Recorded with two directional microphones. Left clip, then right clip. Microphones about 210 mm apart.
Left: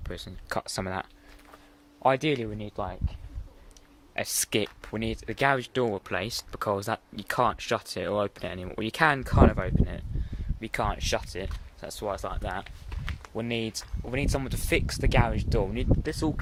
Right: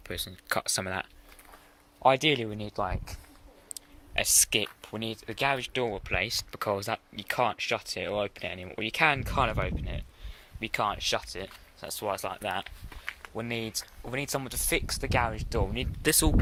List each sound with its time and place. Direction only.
0.0 s speech: 5° left (ahead or behind); by 3.2 s 10° right (ahead or behind)
4.1 s speech: 10° left (ahead or behind); by 6.1 s 30° left (ahead or behind)
6.1 s speech: 15° left (ahead or behind)
11.9 s speech: centre (ahead or behind)
12.6 s a sound: 20° right (ahead or behind)
13.3 s speech: 20° left (ahead or behind)